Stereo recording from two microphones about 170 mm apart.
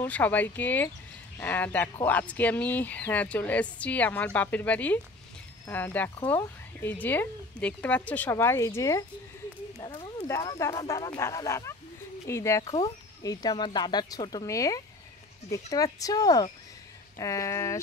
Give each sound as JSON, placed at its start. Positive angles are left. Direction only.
{"t": 0.0, "sound": "a woman's voice", "side_deg": 10}
{"t": 9.8, "sound": "speech", "side_deg": 30}
{"t": 10.2, "sound": "a woman's voice", "side_deg": 20}